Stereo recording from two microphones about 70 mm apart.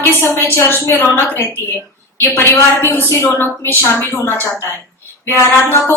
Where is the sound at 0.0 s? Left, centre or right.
Left.